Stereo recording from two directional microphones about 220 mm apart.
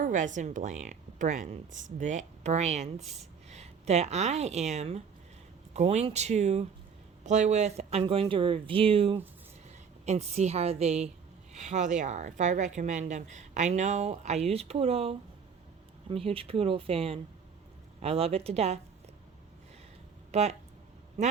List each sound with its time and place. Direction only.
0.0 s a woman's voice: 35° right (ahead or behind)
3.0 s speech: centre (ahead or behind)
3.5 s a woman's voice: 30° right (ahead or behind)
20.3 s speech: 30° right (ahead or behind)